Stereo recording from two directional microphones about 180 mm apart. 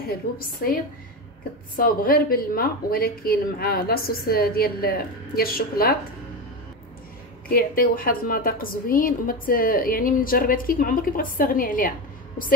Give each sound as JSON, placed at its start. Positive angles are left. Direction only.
{"t": 0.6, "sound": "speech", "side_deg": 55}
{"t": 1.8, "sound": "speech", "side_deg": 55}
{"t": 7.4, "sound": "a woman's voice", "side_deg": 55}